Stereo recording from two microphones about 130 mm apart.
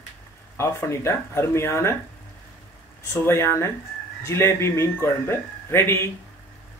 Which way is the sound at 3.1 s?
20° left (ahead or behind).